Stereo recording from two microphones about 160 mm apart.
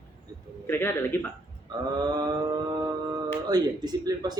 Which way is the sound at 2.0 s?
25° right (ahead or behind).